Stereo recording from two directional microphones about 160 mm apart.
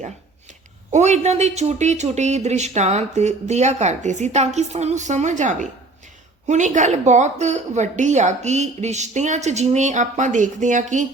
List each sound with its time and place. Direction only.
0.9 s speech: 45° right (ahead or behind)